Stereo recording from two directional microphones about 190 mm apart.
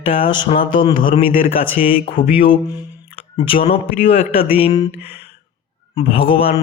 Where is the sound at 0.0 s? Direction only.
30° left (ahead or behind).